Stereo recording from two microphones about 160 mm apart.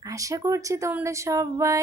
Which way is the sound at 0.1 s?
20° right (ahead or behind).